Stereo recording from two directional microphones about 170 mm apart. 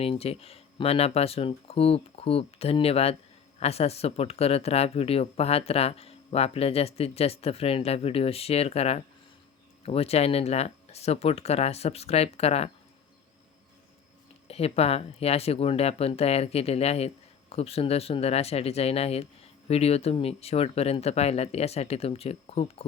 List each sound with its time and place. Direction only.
0.0 s speech: 35° left (ahead or behind)
14.4 s speech: 35° left (ahead or behind)